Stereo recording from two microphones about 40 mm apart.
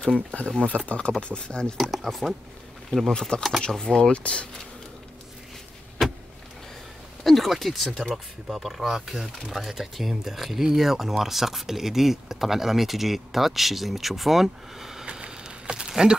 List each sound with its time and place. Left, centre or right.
0.0 s speech: left
1.8 s speech: centre
3.1 s speech: left
4.1 s speech: left
7.2 s speech: centre
15.0 s a sound: right
15.9 s speech: centre